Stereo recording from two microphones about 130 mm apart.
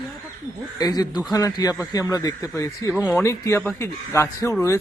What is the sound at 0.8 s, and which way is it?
A man's voice, 30° left (ahead or behind).